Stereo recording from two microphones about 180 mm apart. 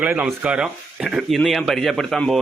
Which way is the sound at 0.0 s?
5° right (ahead or behind).